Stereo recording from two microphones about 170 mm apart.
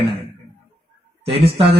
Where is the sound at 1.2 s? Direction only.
35° right (ahead or behind).